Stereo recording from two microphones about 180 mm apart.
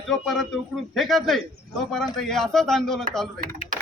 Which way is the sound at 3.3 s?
50° right (ahead or behind).